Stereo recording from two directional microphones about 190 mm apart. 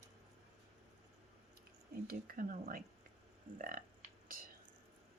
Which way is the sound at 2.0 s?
50° right (ahead or behind).